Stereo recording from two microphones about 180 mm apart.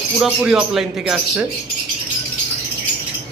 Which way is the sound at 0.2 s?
5° right (ahead or behind).